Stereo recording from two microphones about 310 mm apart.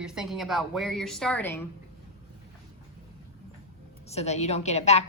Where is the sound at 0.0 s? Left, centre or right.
Centre.